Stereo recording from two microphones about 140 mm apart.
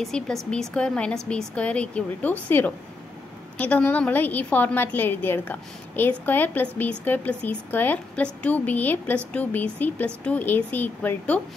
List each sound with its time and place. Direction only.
0.0 s a woman's voice: centre (ahead or behind)